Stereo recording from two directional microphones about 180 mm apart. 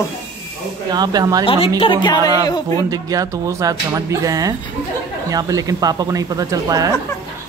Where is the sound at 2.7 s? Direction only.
20° right (ahead or behind).